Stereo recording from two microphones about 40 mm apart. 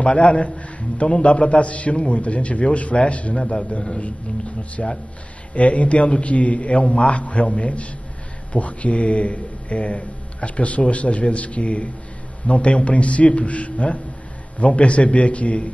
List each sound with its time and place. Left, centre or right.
0.0 s a man's voice: left